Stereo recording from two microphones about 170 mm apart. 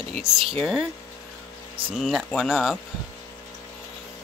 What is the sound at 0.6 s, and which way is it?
Speech, centre (ahead or behind).